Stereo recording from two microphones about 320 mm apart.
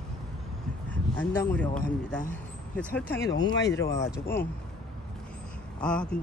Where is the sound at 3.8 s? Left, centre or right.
Centre.